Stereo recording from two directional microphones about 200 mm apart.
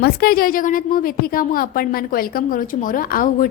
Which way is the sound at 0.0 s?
50° left (ahead or behind).